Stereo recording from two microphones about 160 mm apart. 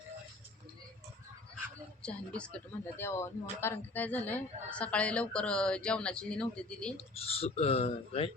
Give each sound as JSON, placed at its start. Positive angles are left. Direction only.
{"t": 2.0, "sound": "speech", "side_deg": 5}
{"t": 6.9, "sound": "speech", "side_deg": 40}